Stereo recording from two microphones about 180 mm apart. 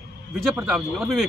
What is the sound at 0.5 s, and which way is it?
Speech, centre (ahead or behind).